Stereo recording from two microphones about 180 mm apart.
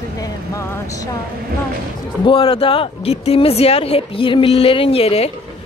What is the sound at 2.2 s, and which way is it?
Speech, 25° left (ahead or behind).